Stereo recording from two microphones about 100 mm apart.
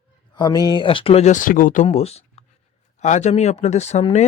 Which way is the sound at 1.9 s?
90° left.